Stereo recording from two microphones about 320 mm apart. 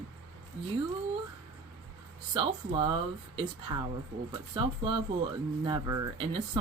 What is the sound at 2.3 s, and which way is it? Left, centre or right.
Speech, centre.